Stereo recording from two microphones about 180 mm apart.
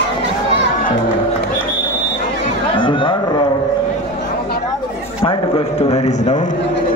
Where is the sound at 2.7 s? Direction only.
30° left (ahead or behind).